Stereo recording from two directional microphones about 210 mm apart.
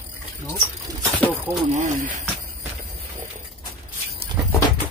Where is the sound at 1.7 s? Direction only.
35° right (ahead or behind).